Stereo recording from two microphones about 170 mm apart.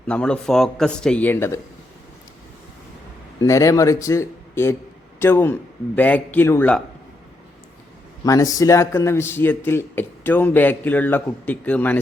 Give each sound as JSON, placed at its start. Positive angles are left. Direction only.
{"t": 0.1, "sound": "a man's voice", "side_deg": 5}
{"t": 3.4, "sound": "a man's voice", "side_deg": 20}
{"t": 8.2, "sound": "a man's voice", "side_deg": 20}